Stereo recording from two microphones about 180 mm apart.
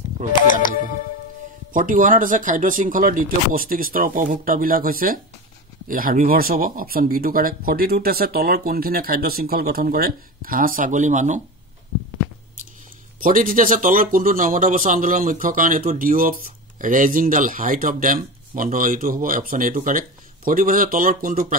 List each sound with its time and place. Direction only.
0.5 s music: 50° left (ahead or behind)
1.7 s speech: 50° right (ahead or behind)
13.2 s speech: 50° right (ahead or behind)